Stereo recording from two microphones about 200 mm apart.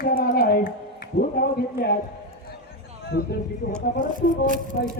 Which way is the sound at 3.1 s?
50° left (ahead or behind).